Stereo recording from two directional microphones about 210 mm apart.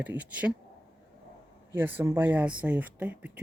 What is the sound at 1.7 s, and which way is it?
Speech, 10° right (ahead or behind).